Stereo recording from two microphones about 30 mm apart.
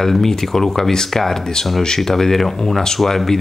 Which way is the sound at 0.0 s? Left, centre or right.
Centre.